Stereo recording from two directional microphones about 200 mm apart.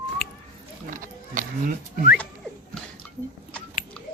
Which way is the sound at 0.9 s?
40° right (ahead or behind).